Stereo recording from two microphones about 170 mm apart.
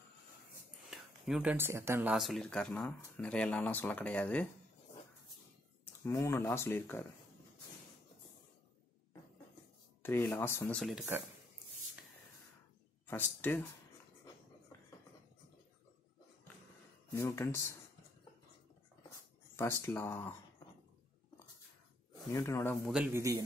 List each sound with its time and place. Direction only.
0.8 s speech: 5° right (ahead or behind)
2.1 s speech: centre (ahead or behind)
6.0 s speech: 15° left (ahead or behind)
10.0 s speech: 10° left (ahead or behind)
13.0 s speech: 10° left (ahead or behind)
17.1 s speech: 15° left (ahead or behind)
19.5 s speech: 15° left (ahead or behind)
22.3 s speech: 15° left (ahead or behind)
22.8 s a man's voice: 5° right (ahead or behind)